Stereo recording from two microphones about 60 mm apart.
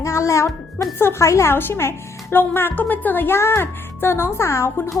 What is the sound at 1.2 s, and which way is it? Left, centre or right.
Speech, left.